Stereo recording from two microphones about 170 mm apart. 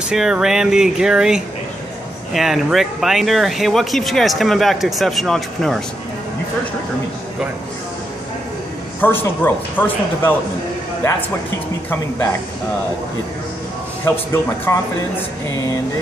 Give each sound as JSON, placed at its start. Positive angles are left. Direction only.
{"t": 0.1, "sound": "speech", "side_deg": -5}
{"t": 9.0, "sound": "speech", "side_deg": 10}
{"t": 11.9, "sound": "speech", "side_deg": 15}
{"t": 14.3, "sound": "speech", "side_deg": 15}